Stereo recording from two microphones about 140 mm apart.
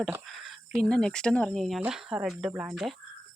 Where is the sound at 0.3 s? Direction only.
Centre (ahead or behind).